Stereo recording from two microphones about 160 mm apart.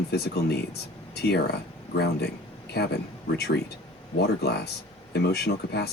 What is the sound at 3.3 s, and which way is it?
Speech, 90° left.